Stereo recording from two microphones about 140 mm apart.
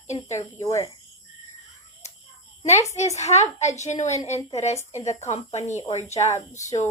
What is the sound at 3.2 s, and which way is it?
A woman's voice, 55° left (ahead or behind).